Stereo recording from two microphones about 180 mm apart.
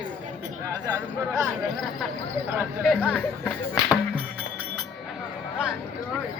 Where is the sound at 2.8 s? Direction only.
5° left (ahead or behind).